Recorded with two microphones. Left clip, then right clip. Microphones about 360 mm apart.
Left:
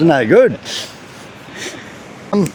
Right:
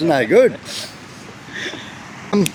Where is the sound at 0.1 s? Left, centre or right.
Left.